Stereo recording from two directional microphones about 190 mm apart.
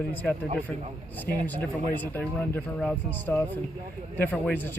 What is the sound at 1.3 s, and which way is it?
Speech, 55° left (ahead or behind).